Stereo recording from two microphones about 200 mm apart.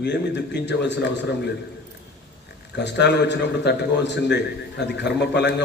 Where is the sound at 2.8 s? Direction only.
60° left (ahead or behind).